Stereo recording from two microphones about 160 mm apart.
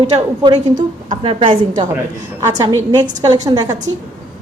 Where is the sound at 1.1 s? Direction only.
35° right (ahead or behind).